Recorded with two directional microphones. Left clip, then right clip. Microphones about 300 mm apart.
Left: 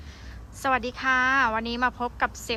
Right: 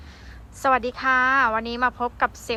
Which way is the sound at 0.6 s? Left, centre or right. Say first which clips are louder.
Right 4 dB; centre.